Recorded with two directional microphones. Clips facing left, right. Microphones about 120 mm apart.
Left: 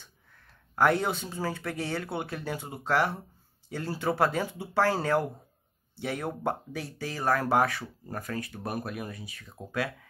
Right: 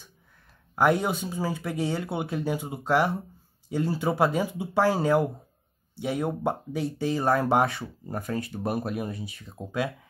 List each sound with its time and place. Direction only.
0.7 s speech: 15° right (ahead or behind)